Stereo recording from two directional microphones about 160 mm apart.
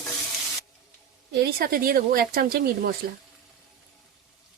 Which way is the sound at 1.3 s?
70° right (ahead or behind).